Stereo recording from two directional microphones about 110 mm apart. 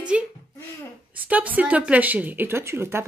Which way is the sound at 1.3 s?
15° right (ahead or behind).